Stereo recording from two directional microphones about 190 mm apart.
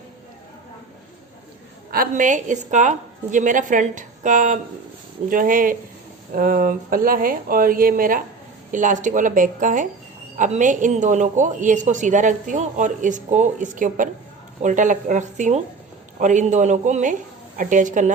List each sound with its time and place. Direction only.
1.9 s speech: 45° right (ahead or behind)